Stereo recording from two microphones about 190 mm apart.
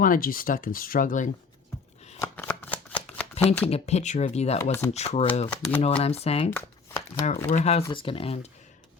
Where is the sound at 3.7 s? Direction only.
35° left (ahead or behind).